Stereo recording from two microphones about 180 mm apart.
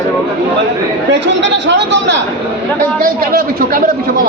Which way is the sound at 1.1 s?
80° right.